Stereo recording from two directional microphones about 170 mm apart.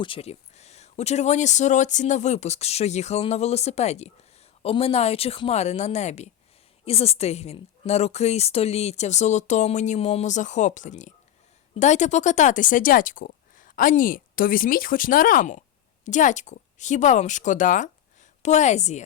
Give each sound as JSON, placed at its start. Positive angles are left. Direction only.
{"t": 0.0, "sound": "a woman's voice", "side_deg": 35}